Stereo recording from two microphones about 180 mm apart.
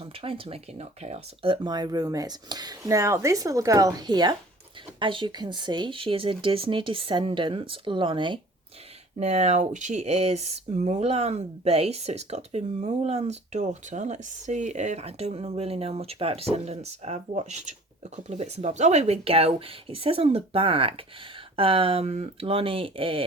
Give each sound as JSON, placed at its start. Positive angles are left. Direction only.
{"t": 0.0, "sound": "speech", "side_deg": -30}